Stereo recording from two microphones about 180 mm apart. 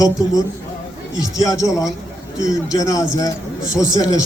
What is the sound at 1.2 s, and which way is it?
A man's voice, 20° left (ahead or behind).